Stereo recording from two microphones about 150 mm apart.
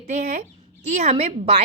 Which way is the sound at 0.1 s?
50° right (ahead or behind).